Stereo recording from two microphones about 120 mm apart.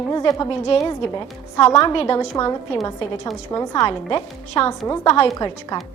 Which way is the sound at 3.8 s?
50° left (ahead or behind).